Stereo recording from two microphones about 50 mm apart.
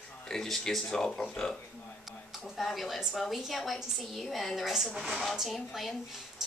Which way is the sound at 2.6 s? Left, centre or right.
Centre.